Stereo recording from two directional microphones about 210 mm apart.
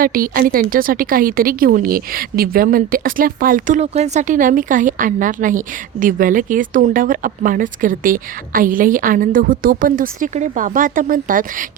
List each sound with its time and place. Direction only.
0.0 s a woman's voice: 45° right (ahead or behind)